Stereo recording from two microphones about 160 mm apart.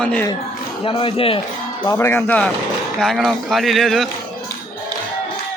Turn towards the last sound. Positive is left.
turn(degrees=0)  # may be behind; listen again after turning